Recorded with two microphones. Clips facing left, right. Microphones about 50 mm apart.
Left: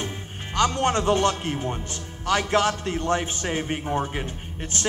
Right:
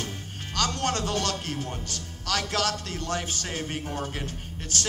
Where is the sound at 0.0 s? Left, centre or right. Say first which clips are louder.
Left 3 dB; left.